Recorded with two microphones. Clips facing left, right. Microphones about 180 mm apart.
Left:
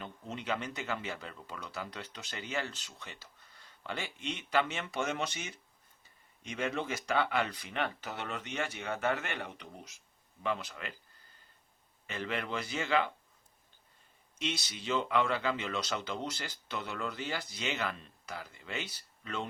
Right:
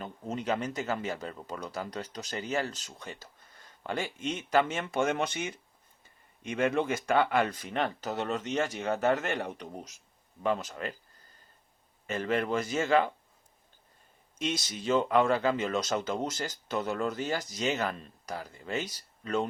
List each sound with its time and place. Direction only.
0.0 s speech: 40° right (ahead or behind)
12.0 s speech: 45° right (ahead or behind)
14.3 s speech: 45° right (ahead or behind)